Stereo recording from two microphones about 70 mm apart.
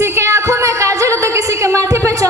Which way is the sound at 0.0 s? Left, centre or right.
Right.